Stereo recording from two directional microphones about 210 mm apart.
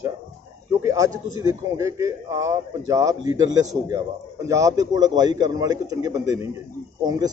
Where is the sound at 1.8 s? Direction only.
15° right (ahead or behind).